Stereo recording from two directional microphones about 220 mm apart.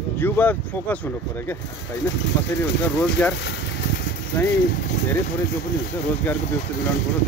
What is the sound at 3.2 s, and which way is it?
Speech, 5° left (ahead or behind).